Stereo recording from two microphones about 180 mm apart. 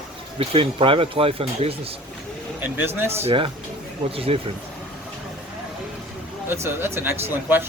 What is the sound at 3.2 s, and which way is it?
Speech, 30° right (ahead or behind).